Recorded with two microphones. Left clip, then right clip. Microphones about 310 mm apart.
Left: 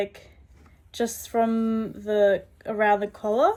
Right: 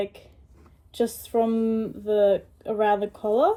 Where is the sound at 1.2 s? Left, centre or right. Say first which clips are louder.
Even; left.